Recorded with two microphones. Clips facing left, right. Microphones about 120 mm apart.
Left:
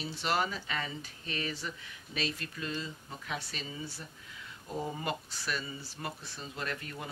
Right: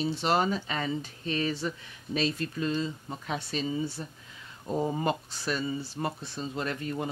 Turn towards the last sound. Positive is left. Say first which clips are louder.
# right 7 dB
turn(degrees=-30)  # may be behind; listen again after turning